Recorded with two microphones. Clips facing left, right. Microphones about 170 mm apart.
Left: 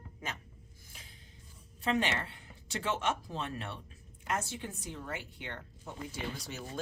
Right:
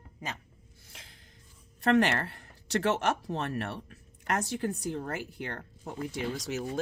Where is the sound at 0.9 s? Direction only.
90° right.